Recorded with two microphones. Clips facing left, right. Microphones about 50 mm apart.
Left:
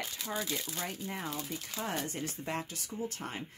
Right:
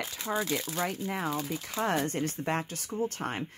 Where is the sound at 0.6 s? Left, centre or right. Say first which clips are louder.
Right 7 dB; right.